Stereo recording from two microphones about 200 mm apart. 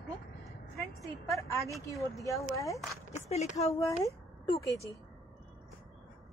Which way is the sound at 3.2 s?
35° left (ahead or behind).